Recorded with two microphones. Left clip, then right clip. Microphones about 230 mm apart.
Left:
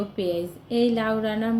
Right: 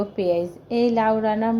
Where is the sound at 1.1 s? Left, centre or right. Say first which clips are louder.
Right 5 dB; centre.